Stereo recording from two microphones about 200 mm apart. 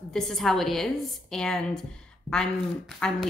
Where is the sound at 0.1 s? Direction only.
Centre (ahead or behind).